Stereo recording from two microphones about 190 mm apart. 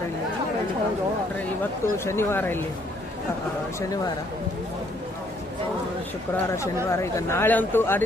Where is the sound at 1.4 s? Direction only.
15° left (ahead or behind).